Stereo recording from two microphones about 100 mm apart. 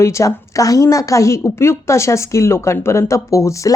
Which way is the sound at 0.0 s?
30° left (ahead or behind).